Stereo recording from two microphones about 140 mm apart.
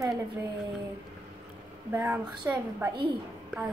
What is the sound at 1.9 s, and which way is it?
A woman's voice, 10° right (ahead or behind).